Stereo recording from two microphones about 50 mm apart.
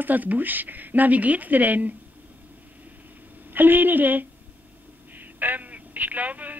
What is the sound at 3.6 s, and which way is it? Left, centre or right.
Speech, right.